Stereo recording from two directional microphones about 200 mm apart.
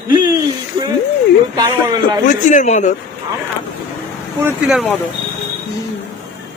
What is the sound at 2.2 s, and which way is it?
Speech, 40° left (ahead or behind).